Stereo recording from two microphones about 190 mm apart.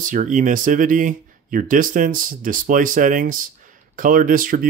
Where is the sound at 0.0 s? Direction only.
45° right (ahead or behind).